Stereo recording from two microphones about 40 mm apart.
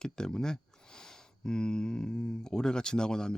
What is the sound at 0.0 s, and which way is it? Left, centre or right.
Speech, centre.